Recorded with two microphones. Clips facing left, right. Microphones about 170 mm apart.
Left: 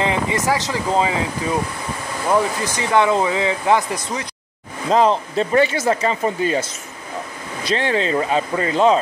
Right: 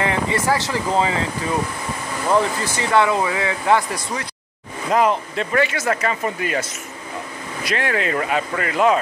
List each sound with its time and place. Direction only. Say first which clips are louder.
0.0 s speech: left 1 dB; 15° left (ahead or behind)
2.6 s speech: left 1 dB; 15° left (ahead or behind)
7.6 s speech: left 3 dB; 25° left (ahead or behind)